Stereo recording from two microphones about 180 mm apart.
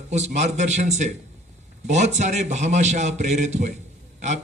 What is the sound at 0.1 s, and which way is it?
A man's voice, 40° right (ahead or behind).